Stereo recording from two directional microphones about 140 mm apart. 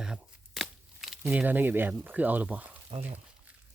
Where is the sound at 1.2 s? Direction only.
10° right (ahead or behind).